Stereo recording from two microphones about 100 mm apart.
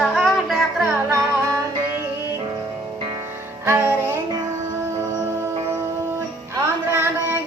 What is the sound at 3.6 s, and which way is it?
Music, 25° right (ahead or behind).